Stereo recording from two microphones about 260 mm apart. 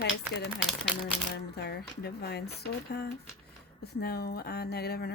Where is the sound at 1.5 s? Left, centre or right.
Left.